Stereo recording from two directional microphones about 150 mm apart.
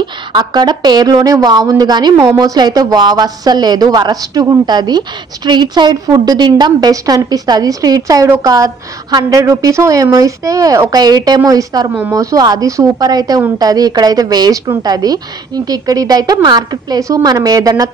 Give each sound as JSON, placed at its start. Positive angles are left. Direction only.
{"t": 0.0, "sound": "speech", "side_deg": -30}